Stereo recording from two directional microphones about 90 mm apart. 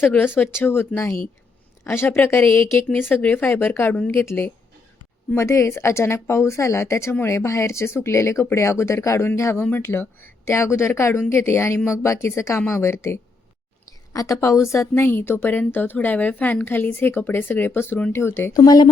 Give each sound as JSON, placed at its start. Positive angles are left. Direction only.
{"t": 0.0, "sound": "speech", "side_deg": 25}
{"t": 18.5, "sound": "speech", "side_deg": 45}